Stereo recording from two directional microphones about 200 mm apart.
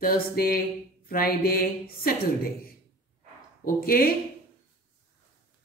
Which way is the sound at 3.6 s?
45° left (ahead or behind).